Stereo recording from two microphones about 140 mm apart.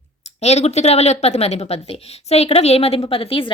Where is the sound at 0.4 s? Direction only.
50° left (ahead or behind).